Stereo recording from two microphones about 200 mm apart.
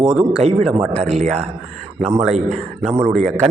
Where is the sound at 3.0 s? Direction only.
5° left (ahead or behind).